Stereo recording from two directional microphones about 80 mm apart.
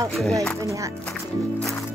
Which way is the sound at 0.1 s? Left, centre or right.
Centre.